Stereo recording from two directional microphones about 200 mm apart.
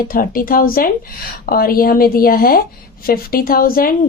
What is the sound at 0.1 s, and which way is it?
A woman's voice, 45° left (ahead or behind).